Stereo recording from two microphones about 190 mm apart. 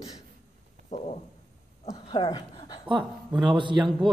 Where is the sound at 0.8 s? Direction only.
35° left (ahead or behind).